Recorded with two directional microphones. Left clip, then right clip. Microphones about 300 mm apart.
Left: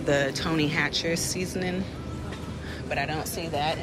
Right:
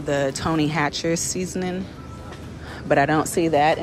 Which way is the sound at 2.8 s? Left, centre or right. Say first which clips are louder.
Right 11 dB; right.